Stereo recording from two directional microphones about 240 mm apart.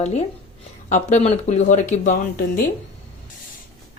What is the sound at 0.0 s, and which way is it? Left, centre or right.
A woman's voice, left.